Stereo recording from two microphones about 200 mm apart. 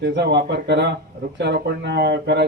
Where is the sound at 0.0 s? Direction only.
60° right (ahead or behind).